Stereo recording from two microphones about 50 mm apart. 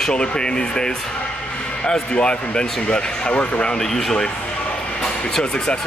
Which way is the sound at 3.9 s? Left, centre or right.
Centre.